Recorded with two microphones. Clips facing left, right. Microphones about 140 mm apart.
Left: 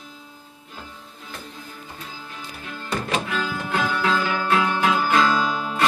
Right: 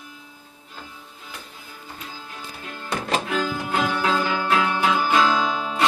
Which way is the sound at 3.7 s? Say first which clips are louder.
Even; 20° right (ahead or behind).